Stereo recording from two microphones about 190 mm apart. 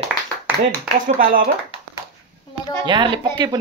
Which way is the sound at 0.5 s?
10° right (ahead or behind).